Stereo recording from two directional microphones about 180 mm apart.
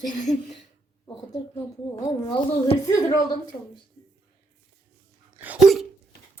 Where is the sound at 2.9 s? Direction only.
20° left (ahead or behind).